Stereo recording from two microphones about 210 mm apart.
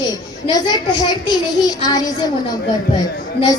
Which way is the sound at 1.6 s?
20° left (ahead or behind).